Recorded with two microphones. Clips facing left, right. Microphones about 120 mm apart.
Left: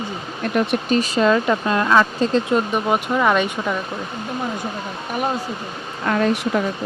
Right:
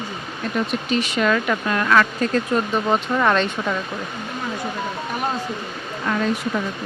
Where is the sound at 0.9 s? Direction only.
35° left (ahead or behind); by 3.7 s 10° left (ahead or behind).